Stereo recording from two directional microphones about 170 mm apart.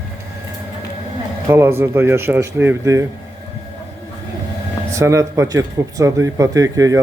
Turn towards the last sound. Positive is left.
turn(degrees=-20)  # may be behind; listen again after turning